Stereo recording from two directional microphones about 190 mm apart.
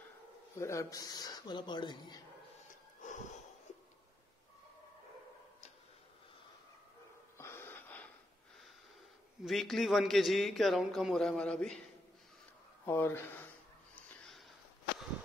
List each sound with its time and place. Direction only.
0.6 s speech: 15° left (ahead or behind)
2.7 s wheeze: 40° left (ahead or behind)
7.3 s wheeze: 15° left (ahead or behind)
9.4 s a man's voice: centre (ahead or behind)
12.8 s speech: 15° left (ahead or behind)
13.9 s a sound: centre (ahead or behind)